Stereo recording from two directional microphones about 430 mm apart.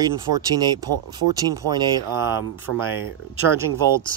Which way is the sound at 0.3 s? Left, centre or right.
Centre.